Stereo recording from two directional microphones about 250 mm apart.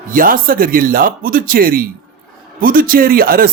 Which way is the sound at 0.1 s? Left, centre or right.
Right.